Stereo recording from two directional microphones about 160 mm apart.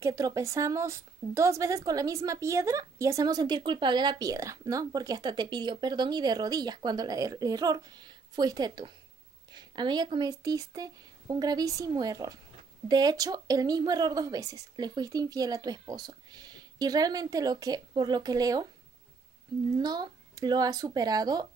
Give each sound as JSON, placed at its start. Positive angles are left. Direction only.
{"t": 0.0, "sound": "a woman's voice", "side_deg": -20}
{"t": 19.8, "sound": "a woman's voice", "side_deg": -25}